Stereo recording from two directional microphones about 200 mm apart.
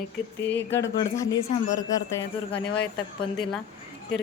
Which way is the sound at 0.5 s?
10° left (ahead or behind).